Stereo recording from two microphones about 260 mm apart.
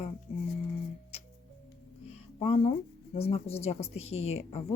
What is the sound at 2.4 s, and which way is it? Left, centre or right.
Speech, left.